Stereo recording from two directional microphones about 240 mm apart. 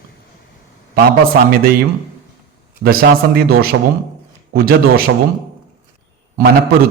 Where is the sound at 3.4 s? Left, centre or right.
Right.